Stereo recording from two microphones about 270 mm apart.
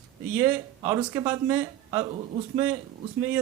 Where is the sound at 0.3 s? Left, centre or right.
Centre.